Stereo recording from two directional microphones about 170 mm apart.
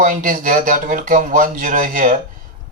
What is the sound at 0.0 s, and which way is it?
Speech, 50° right (ahead or behind).